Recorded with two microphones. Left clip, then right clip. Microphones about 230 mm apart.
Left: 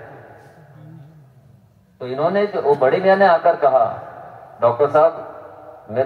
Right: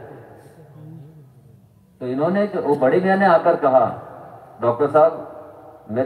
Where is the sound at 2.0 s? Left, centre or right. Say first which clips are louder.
Left 2 dB; left.